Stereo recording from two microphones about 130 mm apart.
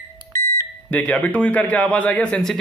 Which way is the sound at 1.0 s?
10° left (ahead or behind).